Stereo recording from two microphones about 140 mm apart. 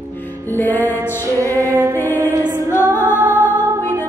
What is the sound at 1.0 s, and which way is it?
Music, 20° right (ahead or behind).